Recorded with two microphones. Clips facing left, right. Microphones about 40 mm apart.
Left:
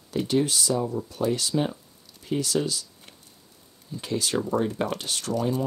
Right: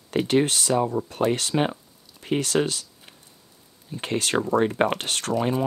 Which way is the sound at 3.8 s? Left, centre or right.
Right.